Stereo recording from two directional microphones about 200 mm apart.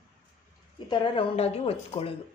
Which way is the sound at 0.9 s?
25° left (ahead or behind).